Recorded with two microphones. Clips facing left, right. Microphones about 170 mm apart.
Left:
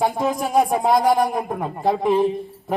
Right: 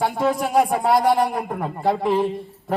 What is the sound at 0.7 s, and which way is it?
A man's voice, 10° left (ahead or behind).